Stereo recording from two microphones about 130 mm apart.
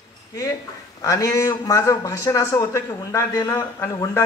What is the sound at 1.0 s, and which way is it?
Speech, 25° left (ahead or behind).